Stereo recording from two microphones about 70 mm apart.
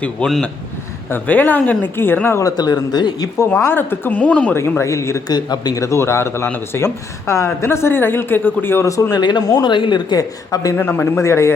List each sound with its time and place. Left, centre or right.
0.2 s a man's voice: centre
1.1 s a man's voice: left
2.4 s speech: left
3.6 s a woman's voice: left
4.2 s a man's voice: centre
4.5 s a woman's voice: left
5.3 s speech: left
5.8 s a woman's voice: left
8.9 s speech: left
9.1 s speech: left
10.5 s speech: left
10.8 s a woman's voice: left
11.2 s a woman's voice: left